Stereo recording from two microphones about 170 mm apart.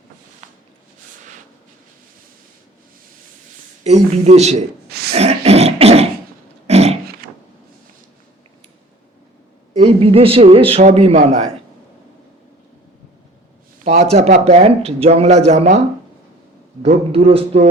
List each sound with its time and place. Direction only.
3.8 s a man's voice: 40° right (ahead or behind)
4.9 s throat clearing: 65° right (ahead or behind)
5.1 s beatboxing: 40° right (ahead or behind)
6.7 s dog: 35° right (ahead or behind)
9.7 s a man's voice: 35° right (ahead or behind)
13.8 s a man's voice: 40° right (ahead or behind)
16.8 s a man's voice: 35° right (ahead or behind)